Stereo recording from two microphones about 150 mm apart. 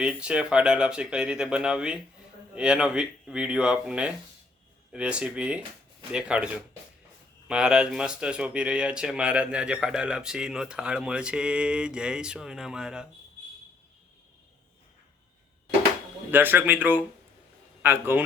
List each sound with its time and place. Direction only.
0.0 s speech: 5° right (ahead or behind)
16.3 s speech: 15° right (ahead or behind)